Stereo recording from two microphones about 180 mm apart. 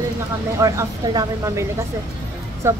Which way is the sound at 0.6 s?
15° right (ahead or behind).